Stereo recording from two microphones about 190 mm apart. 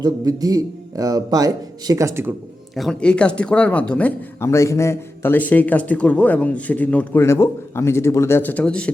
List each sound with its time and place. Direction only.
0.0 s speech: 20° right (ahead or behind)
2.7 s speech: centre (ahead or behind)